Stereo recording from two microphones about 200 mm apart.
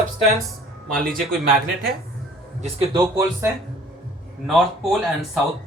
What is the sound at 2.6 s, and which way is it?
Speech, 20° right (ahead or behind).